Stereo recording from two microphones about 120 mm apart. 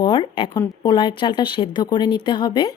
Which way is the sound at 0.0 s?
40° left (ahead or behind).